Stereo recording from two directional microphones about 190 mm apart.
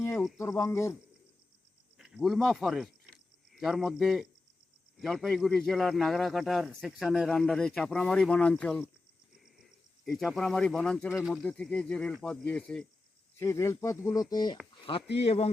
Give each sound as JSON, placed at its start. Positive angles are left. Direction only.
{"t": 0.3, "sound": "speech", "side_deg": 15}
{"t": 2.0, "sound": "a man's voice", "side_deg": 0}
{"t": 10.1, "sound": "a man's voice", "side_deg": 0}